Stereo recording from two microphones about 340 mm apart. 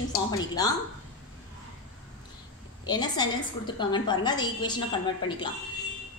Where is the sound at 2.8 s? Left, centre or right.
Centre.